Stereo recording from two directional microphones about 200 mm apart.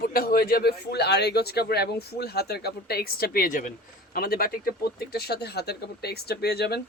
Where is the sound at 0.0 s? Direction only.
50° left (ahead or behind).